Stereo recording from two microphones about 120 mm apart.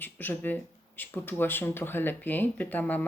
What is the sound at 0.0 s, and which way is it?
Speech, 15° left (ahead or behind).